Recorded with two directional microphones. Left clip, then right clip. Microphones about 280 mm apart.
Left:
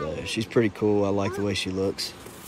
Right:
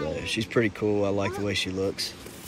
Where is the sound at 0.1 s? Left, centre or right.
Centre.